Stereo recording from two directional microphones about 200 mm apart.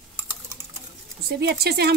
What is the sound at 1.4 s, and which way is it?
Speech, 55° right (ahead or behind).